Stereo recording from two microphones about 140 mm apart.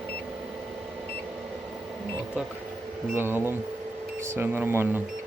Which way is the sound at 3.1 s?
15° right (ahead or behind).